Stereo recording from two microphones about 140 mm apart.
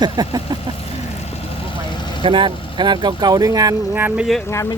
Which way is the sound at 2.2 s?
35° right (ahead or behind).